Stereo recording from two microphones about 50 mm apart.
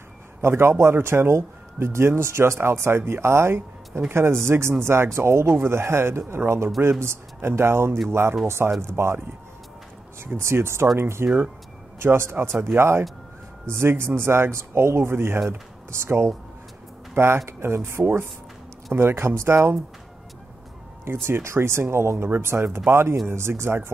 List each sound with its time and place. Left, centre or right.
0.4 s speech: right
5.5 s speech: right
10.2 s speech: right
11.2 s speech: centre
12.0 s speech: right
21.0 s speech: right